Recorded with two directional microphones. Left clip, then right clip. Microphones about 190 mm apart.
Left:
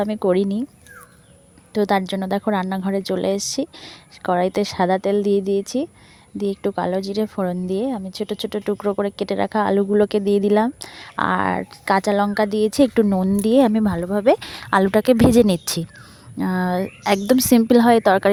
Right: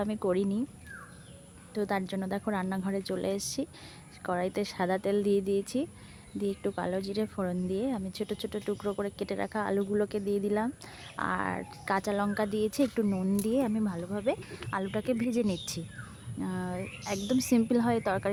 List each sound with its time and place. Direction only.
0.0 s speech: 35° left (ahead or behind)
1.7 s speech: 40° left (ahead or behind)